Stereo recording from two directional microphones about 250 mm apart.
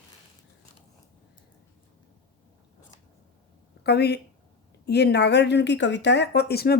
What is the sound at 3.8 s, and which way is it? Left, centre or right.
A woman's voice, left.